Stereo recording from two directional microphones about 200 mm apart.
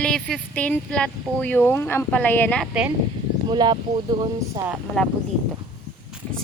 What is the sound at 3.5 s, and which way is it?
Speech, 20° right (ahead or behind).